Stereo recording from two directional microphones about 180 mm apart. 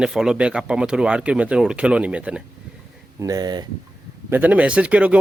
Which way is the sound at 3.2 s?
20° right (ahead or behind).